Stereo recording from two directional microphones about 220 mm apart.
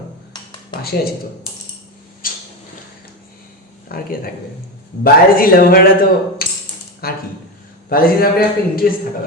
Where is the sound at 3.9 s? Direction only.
45° left (ahead or behind).